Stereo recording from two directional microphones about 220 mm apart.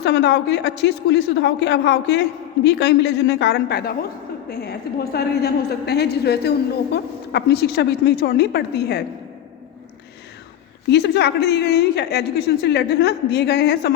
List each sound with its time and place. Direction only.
0.0 s a woman's voice: 50° left (ahead or behind)
10.8 s a woman's voice: 50° left (ahead or behind)